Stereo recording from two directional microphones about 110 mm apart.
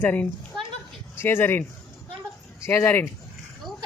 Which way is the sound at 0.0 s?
15° left (ahead or behind).